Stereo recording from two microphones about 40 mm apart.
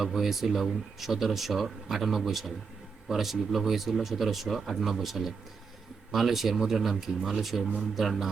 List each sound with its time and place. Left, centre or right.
0.0 s speech: centre